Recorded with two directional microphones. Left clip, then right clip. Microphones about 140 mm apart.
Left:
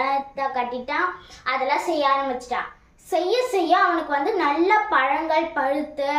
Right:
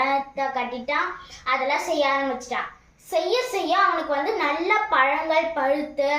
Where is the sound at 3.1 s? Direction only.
35° left (ahead or behind).